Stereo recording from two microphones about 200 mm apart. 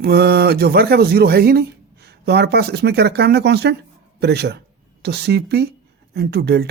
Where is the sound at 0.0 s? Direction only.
55° right (ahead or behind).